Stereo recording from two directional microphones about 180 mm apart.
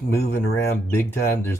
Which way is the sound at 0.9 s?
15° left (ahead or behind).